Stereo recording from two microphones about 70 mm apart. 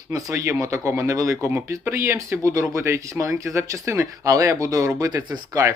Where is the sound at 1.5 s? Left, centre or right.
Right.